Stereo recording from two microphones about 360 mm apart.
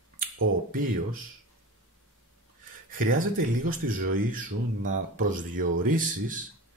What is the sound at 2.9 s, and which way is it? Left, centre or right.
Speech, right.